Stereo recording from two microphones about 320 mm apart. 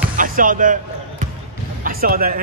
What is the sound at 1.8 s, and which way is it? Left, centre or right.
Speech, right.